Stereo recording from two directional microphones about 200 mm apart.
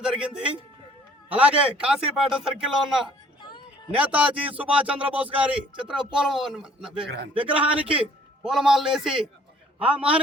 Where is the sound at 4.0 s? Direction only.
5° right (ahead or behind).